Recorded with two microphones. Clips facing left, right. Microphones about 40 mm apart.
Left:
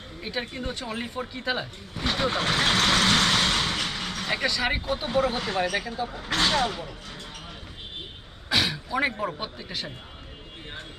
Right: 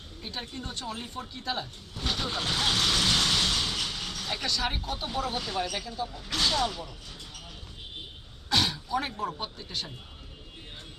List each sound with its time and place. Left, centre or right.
0.2 s speech: left
1.5 s vehicle: left
4.4 s speech: centre
4.9 s speech: left
8.4 s a sound: centre
9.4 s speech: centre